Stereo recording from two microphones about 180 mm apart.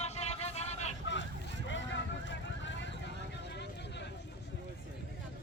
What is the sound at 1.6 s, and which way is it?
Vehicle, 90° left.